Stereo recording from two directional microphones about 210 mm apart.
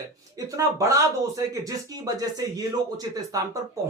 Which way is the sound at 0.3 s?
15° right (ahead or behind).